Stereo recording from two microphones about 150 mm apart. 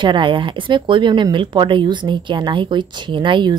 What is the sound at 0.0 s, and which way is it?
Speech, 35° right (ahead or behind).